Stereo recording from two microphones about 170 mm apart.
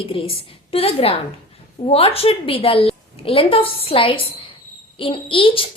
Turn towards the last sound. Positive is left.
turn(degrees=30)  # may be behind; listen again after turning